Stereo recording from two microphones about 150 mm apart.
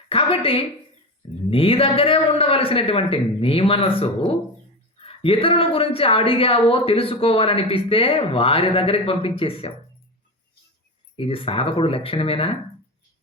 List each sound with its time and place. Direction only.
0.1 s a woman's voice: 40° left (ahead or behind)
11.2 s a woman's voice: 40° left (ahead or behind)